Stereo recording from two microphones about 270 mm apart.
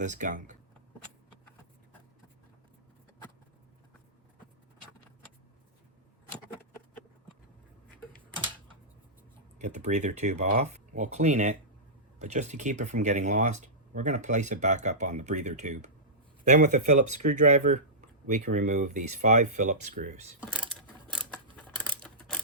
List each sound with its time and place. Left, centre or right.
0.0 s speech: right
9.6 s speech: right
20.4 s a sound: centre
21.5 s typewriter: centre